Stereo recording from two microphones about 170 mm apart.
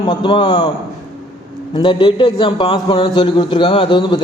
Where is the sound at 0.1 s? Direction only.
30° left (ahead or behind).